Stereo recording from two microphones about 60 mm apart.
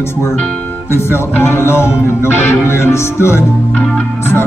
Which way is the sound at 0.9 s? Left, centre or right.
Left.